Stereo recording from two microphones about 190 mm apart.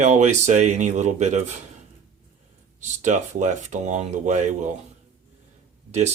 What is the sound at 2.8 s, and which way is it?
Speech, 40° right (ahead or behind).